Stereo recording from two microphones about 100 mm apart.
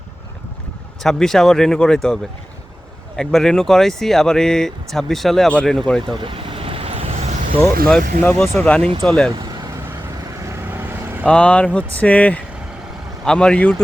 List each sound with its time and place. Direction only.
1.0 s speech: 5° left (ahead or behind)
3.2 s speech: 5° left (ahead or behind)
6.1 s vehicle: 60° right (ahead or behind); by 7.6 s 80° right
8.4 s speech: 10° left (ahead or behind)
9.3 s vehicle: 40° right (ahead or behind)
10.4 s vehicle: 25° right (ahead or behind)
11.3 s speech: 10° left (ahead or behind)